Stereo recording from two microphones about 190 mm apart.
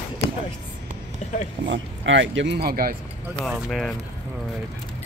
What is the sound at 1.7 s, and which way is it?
Speech, 75° right (ahead or behind).